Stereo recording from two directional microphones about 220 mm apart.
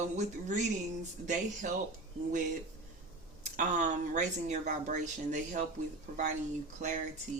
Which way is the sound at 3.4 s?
35° right (ahead or behind).